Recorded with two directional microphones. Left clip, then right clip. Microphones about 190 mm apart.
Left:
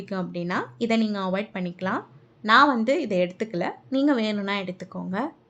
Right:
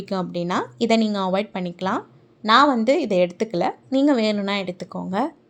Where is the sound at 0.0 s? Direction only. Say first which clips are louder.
Right 5 dB; 25° right (ahead or behind).